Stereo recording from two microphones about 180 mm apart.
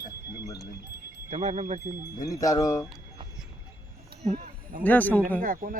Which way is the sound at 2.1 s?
20° left (ahead or behind).